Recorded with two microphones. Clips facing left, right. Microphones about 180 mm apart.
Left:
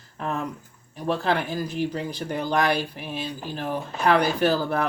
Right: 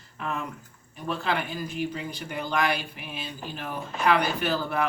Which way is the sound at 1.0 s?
40° left (ahead or behind).